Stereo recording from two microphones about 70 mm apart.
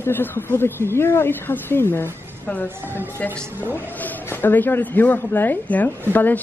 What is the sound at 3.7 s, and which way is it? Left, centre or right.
Speech, left.